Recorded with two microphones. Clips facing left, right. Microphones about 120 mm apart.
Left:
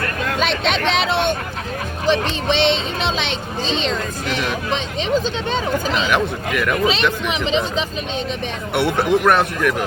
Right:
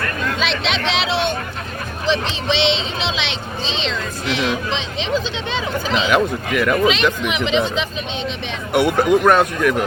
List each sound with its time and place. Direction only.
0.3 s speech: 50° left (ahead or behind)
6.1 s speech: centre (ahead or behind)
7.3 s speech: 35° left (ahead or behind)
8.7 s speech: centre (ahead or behind)